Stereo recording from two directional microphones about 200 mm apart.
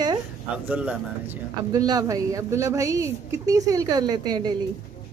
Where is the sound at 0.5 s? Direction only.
5° right (ahead or behind).